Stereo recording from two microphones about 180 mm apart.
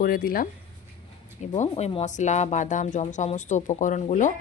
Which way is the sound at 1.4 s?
40° left (ahead or behind).